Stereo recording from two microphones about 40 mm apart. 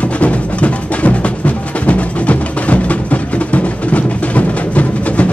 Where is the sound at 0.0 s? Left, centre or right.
Left.